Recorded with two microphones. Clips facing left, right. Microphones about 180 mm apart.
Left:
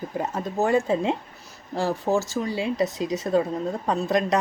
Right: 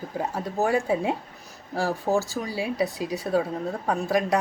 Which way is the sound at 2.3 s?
10° right (ahead or behind).